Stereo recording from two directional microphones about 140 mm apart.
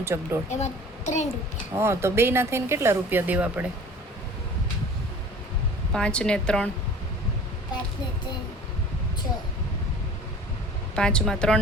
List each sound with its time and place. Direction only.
0.0 s speech: 20° right (ahead or behind)
0.5 s a child's voice: 55° left (ahead or behind)
1.7 s speech: 20° right (ahead or behind)
5.9 s a woman's voice: 5° left (ahead or behind)
10.9 s a woman's voice: 5° left (ahead or behind)